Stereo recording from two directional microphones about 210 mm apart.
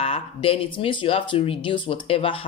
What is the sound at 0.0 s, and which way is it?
Speech, 30° left (ahead or behind).